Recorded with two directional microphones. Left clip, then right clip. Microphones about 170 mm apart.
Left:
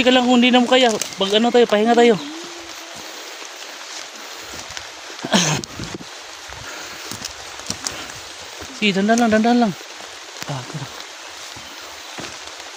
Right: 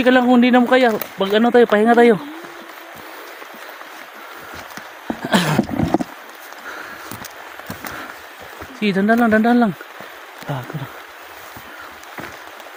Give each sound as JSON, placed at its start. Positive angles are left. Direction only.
{"t": 0.0, "sound": "speech", "side_deg": -15}
{"t": 5.3, "sound": "dog", "side_deg": -15}
{"t": 8.8, "sound": "speech", "side_deg": -10}